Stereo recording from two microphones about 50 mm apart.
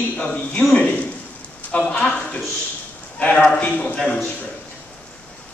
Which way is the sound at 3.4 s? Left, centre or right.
Left.